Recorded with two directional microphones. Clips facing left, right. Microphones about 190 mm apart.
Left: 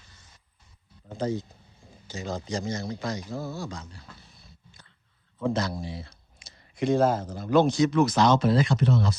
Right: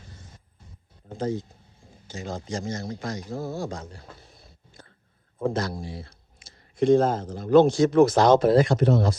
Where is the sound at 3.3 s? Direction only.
50° right (ahead or behind).